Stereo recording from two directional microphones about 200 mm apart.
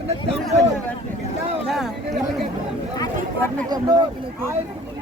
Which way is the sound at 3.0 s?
10° left (ahead or behind).